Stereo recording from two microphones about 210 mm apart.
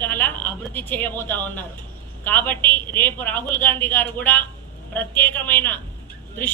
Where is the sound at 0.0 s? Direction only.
10° left (ahead or behind).